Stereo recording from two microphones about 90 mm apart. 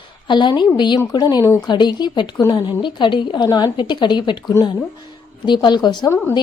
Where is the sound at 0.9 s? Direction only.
45° left (ahead or behind).